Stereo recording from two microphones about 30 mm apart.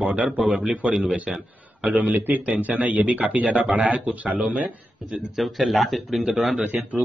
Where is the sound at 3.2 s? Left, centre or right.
Right.